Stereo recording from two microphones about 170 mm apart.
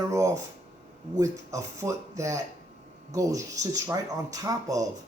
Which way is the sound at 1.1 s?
20° right (ahead or behind).